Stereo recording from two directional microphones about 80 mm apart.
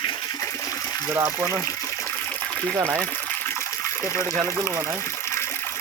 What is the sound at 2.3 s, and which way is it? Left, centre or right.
Water, centre.